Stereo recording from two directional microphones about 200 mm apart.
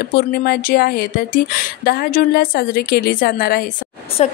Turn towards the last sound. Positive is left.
turn(degrees=35)  # may be behind; listen again after turning